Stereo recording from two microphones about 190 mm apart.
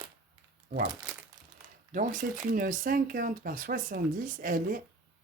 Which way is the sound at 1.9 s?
45° right (ahead or behind).